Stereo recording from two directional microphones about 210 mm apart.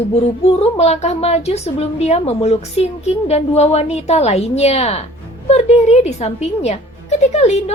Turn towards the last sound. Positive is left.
turn(degrees=30)  # may be behind; listen again after turning